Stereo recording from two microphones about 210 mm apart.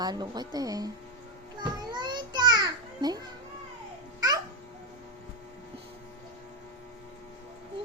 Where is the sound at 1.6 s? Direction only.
20° right (ahead or behind).